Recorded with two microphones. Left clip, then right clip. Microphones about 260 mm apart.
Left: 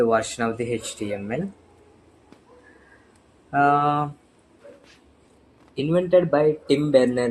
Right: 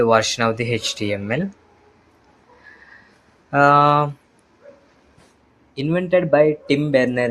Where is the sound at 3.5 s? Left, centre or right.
Right.